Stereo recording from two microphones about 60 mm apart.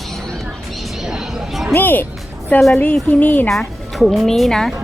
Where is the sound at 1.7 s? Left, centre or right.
Left.